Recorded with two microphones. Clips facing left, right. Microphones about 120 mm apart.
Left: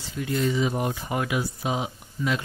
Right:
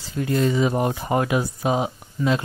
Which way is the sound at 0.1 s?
45° right (ahead or behind).